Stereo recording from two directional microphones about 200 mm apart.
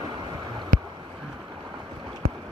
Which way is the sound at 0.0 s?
25° right (ahead or behind).